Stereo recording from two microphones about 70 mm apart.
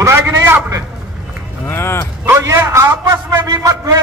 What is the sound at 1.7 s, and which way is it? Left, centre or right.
Dog, left.